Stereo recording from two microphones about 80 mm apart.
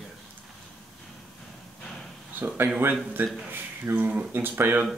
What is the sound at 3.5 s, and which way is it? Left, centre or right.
Speech, right.